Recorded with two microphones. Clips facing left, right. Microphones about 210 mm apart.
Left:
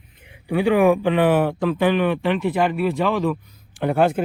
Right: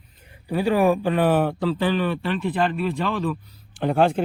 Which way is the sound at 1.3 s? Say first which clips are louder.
Left 2 dB; 15° left (ahead or behind).